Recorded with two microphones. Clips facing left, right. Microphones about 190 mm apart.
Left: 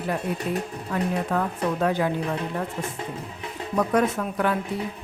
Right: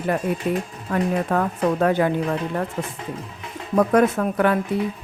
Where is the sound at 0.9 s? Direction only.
55° right (ahead or behind).